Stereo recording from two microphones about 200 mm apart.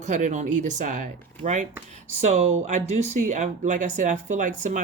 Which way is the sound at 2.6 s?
35° right (ahead or behind).